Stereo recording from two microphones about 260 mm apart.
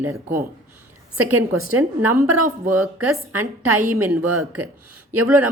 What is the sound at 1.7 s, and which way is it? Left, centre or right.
A woman's voice, right.